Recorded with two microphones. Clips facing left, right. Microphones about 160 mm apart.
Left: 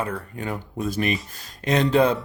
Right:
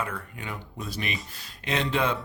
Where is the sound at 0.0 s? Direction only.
40° left (ahead or behind).